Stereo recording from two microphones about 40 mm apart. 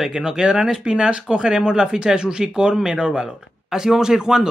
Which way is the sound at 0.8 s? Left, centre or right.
Right.